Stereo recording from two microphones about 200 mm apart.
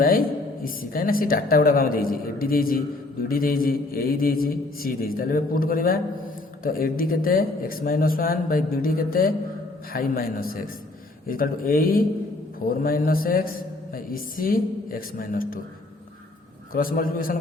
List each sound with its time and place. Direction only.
0.0 s a woman's voice: 45° left (ahead or behind)
16.7 s a woman's voice: 45° left (ahead or behind)